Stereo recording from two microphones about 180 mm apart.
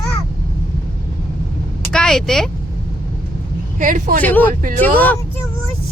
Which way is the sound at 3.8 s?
50° right (ahead or behind).